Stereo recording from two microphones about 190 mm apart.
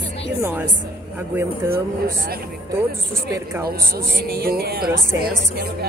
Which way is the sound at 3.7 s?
55° right (ahead or behind).